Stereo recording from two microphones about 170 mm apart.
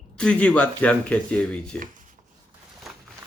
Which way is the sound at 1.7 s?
50° right (ahead or behind).